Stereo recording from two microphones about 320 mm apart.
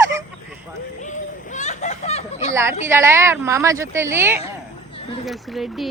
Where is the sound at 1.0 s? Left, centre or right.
Left.